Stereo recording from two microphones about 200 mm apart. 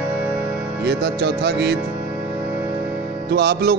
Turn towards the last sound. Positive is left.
turn(degrees=-55)  # may be behind; listen again after turning